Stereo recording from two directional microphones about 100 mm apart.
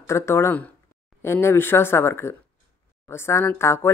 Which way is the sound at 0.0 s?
25° left (ahead or behind).